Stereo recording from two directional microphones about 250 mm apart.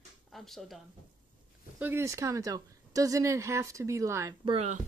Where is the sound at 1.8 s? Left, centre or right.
Centre.